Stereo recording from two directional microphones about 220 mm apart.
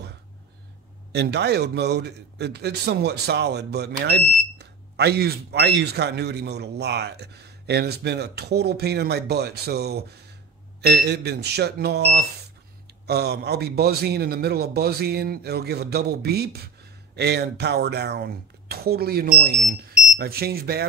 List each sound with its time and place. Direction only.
1.1 s speech: 50° right (ahead or behind)